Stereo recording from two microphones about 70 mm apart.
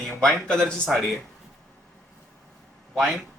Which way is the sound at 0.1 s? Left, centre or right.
Centre.